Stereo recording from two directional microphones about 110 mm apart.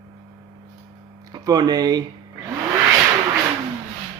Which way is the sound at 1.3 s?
35° right (ahead or behind).